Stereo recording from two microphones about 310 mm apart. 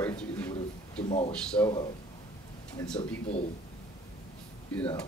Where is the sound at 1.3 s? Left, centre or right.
Centre.